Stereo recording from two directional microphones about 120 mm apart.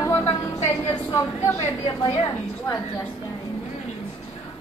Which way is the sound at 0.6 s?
20° left (ahead or behind).